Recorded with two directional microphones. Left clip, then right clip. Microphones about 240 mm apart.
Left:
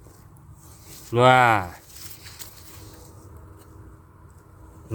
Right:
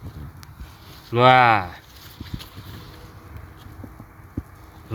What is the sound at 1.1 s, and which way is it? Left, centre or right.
Speech, centre.